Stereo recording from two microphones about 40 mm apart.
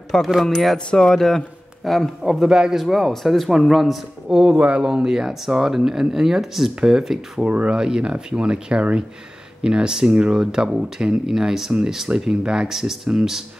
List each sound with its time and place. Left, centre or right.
0.1 s speech: centre
0.5 s speech: centre
2.2 s speech: centre
4.6 s speech: right
4.8 s speech: centre
7.4 s speech: right
7.7 s speech: right
12.6 s speech: centre